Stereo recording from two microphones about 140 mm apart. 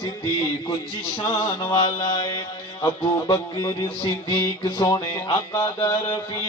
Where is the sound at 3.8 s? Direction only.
35° left (ahead or behind).